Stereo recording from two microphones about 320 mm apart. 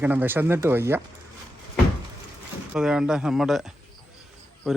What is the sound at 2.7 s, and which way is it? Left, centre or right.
Speech, centre.